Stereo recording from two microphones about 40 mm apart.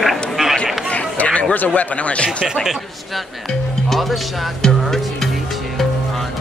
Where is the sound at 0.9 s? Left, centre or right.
Left.